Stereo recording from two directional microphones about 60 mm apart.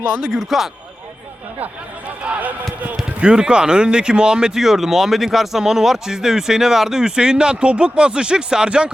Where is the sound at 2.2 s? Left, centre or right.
Right.